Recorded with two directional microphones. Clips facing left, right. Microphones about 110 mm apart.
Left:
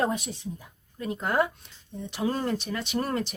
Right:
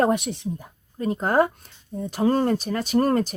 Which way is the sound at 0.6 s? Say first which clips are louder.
Right 8 dB; 40° right (ahead or behind).